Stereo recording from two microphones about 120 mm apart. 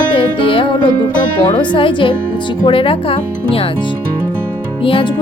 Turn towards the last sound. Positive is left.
turn(degrees=45)  # may be behind; listen again after turning